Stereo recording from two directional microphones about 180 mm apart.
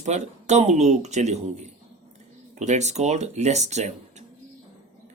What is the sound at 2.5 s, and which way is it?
Speech, 40° right (ahead or behind).